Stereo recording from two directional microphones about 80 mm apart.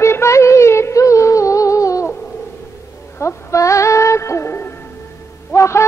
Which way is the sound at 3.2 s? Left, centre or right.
Left.